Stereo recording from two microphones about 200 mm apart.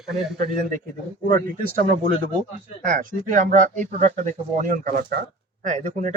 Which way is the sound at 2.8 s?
40° right (ahead or behind).